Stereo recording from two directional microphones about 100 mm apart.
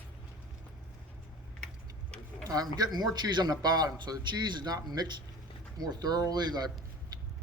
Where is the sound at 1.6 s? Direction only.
10° left (ahead or behind).